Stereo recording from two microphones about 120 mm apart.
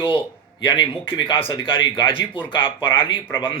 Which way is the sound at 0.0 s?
45° left (ahead or behind).